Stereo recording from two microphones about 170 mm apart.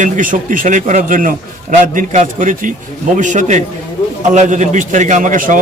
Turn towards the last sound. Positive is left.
turn(degrees=-50)  # may be behind; listen again after turning